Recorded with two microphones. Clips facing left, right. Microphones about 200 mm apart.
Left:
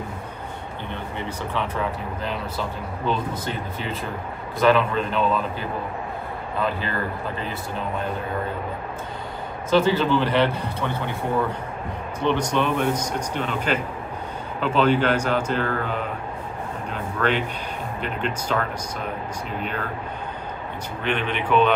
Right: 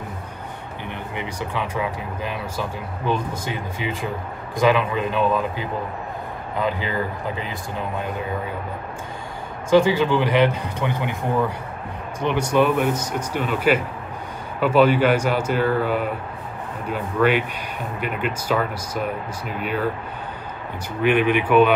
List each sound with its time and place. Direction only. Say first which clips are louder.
1.1 s speech: right 1 dB; 15° right (ahead or behind)
9.7 s speech: right 3 dB; 15° right (ahead or behind)
12.2 s speech: right 3 dB; 10° right (ahead or behind)
21.0 s speech: right 8 dB; 10° right (ahead or behind)